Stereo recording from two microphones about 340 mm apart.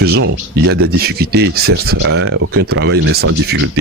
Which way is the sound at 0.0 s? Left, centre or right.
Right.